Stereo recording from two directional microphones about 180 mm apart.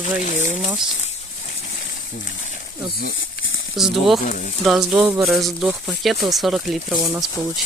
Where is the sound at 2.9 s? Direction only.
65° left (ahead or behind); by 3.8 s 90° left.